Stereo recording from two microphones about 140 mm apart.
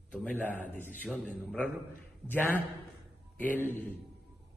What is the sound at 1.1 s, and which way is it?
Speech, centre (ahead or behind).